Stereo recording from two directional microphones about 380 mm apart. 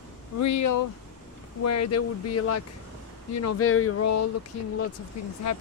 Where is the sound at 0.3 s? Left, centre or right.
Left.